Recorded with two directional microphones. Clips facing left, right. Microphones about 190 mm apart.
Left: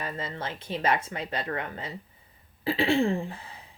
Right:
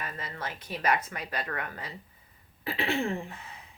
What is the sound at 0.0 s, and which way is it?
Speech, 25° left (ahead or behind).